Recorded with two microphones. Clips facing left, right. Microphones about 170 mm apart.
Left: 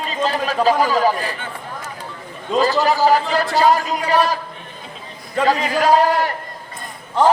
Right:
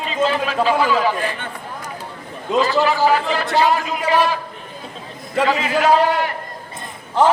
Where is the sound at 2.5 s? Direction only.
40° left (ahead or behind).